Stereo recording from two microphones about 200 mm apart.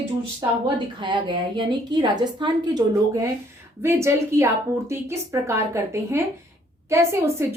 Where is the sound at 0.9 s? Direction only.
25° right (ahead or behind).